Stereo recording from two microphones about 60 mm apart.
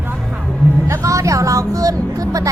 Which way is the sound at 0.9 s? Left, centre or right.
Right.